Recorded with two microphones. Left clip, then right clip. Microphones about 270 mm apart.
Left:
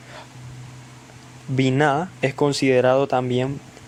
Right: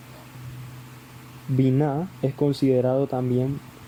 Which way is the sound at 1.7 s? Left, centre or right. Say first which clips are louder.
Left 6 dB; left.